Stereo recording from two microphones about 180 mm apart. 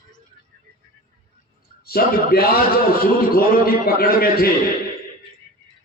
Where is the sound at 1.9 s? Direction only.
55° left (ahead or behind).